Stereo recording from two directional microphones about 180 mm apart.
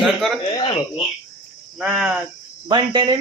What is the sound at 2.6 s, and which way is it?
Speech, 25° right (ahead or behind).